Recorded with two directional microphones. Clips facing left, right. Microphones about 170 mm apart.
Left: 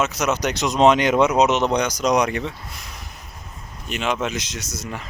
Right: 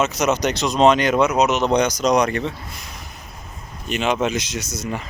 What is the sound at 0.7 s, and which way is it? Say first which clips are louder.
Speech: even; 20° left (ahead or behind).